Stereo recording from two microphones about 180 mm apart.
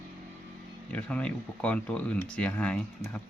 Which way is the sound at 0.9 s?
5° left (ahead or behind).